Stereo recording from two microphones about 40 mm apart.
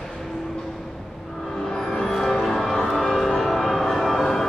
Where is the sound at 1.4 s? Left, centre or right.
Centre.